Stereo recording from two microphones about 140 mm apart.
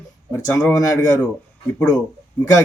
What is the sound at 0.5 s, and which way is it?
Speech, 25° left (ahead or behind).